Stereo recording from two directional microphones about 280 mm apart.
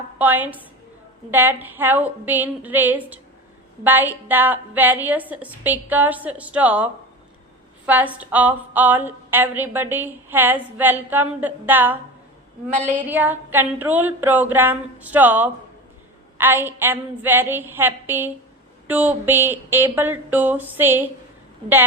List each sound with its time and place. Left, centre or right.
0.2 s a woman's voice: centre
12.7 s a sound: right
13.1 s a woman's voice: centre